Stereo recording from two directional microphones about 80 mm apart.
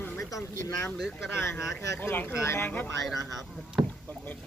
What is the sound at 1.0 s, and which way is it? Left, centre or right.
Speech, centre.